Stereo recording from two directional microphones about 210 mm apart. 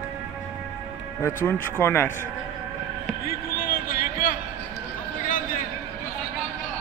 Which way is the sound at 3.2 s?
45° left (ahead or behind).